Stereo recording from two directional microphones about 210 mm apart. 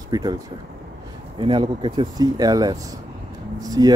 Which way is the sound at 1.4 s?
25° right (ahead or behind).